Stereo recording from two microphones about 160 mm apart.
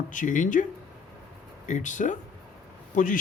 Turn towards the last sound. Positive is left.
turn(degrees=50)  # may be behind; listen again after turning